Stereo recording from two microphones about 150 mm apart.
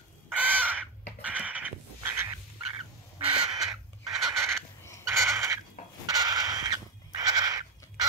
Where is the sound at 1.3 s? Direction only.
10° right (ahead or behind).